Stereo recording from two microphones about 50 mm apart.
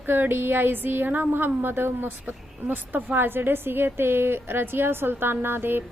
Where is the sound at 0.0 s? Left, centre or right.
Right.